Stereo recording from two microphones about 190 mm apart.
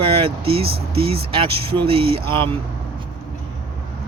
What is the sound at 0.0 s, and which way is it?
Speech, 30° right (ahead or behind).